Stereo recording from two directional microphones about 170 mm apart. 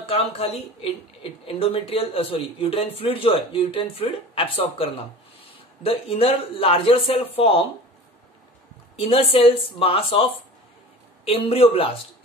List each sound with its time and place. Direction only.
0.1 s speech: 35° left (ahead or behind)
8.9 s speech: 35° left (ahead or behind)
11.2 s speech: 35° left (ahead or behind)